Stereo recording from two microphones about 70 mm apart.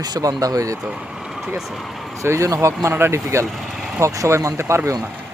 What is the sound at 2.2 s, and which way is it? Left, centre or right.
Speech, right.